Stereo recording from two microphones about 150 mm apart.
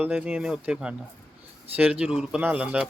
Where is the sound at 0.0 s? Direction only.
10° right (ahead or behind).